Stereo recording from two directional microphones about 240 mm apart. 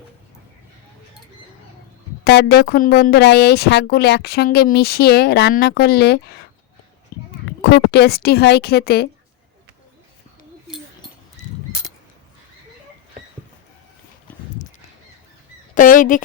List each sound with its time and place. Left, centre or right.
2.2 s speech: left
7.6 s speech: left
11.4 s a sound: left
15.7 s speech: left